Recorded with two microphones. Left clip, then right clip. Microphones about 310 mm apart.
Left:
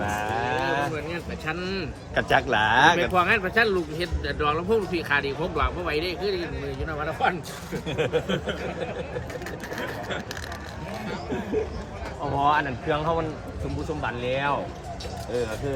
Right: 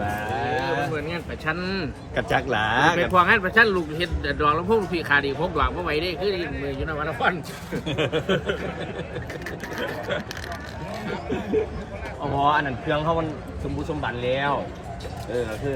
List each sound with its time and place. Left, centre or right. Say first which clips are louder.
0.3 s cattle: right 1 dB; centre
2.1 s speech: left 1 dB; centre
7.9 s speech: right 2 dB; right
12.4 s speech: right 1 dB; centre